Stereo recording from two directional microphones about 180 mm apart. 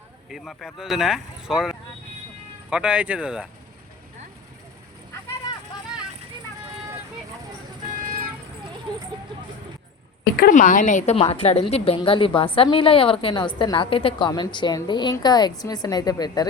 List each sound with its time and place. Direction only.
0.3 s speech: centre (ahead or behind)
7.9 s vehicle: 50° right (ahead or behind)
10.3 s a woman's voice: 50° left (ahead or behind); by 16.5 s 20° left (ahead or behind)